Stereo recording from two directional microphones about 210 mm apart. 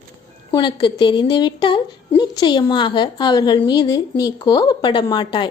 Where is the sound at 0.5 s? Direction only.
20° left (ahead or behind).